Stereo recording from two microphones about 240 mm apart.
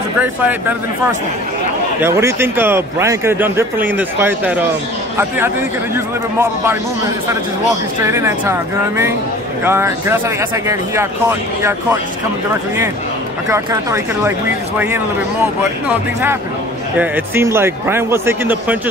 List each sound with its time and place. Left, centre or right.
0.2 s a man's voice: centre
2.0 s a man's voice: centre
8.0 s a man's voice: centre
13.5 s a man's voice: centre
17.0 s a man's voice: centre